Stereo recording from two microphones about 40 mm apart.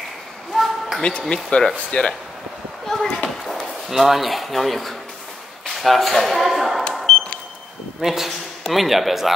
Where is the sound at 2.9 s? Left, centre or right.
Centre.